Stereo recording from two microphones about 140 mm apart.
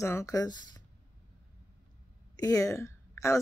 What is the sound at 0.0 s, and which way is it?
Speech, 20° left (ahead or behind).